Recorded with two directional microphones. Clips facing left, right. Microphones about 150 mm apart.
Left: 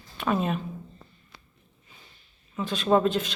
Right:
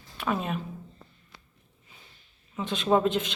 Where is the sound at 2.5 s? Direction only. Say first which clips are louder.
Left 1 dB; 20° right (ahead or behind).